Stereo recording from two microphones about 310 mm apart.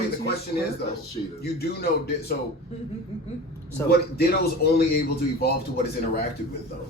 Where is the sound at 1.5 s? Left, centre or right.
Left.